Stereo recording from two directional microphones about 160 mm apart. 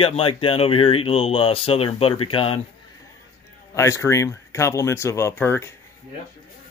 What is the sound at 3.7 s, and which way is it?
A man's voice, 20° left (ahead or behind).